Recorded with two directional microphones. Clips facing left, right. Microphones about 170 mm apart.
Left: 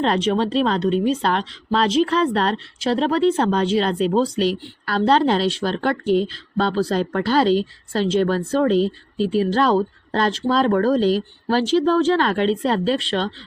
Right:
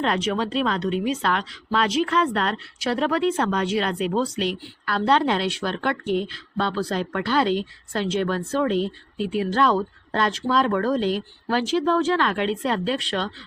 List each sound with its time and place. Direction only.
0.0 s speech: 30° left (ahead or behind)